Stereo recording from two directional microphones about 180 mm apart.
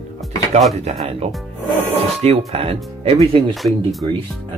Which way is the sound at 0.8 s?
35° right (ahead or behind).